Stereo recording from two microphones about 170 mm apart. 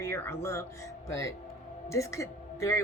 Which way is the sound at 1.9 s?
20° left (ahead or behind).